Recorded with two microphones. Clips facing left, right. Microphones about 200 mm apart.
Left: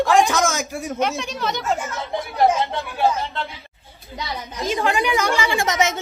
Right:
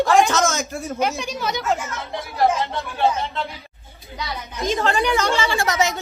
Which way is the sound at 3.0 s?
Centre (ahead or behind).